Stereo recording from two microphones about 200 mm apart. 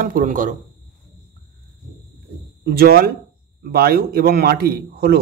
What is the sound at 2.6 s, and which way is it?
A man's voice, 50° right (ahead or behind).